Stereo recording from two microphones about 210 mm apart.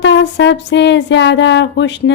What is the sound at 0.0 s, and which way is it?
Speech, 60° left (ahead or behind).